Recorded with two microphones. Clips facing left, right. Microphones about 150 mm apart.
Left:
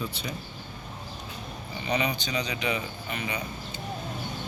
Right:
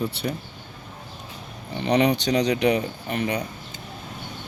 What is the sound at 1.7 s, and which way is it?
Speech, 70° right (ahead or behind).